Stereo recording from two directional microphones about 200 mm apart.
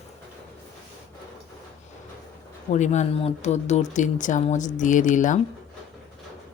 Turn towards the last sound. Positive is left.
turn(degrees=40)  # may be behind; listen again after turning